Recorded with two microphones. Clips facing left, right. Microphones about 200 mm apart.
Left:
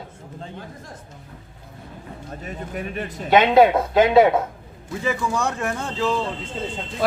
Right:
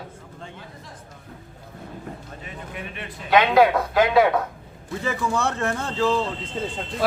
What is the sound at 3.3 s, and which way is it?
Speech, 25° left (ahead or behind).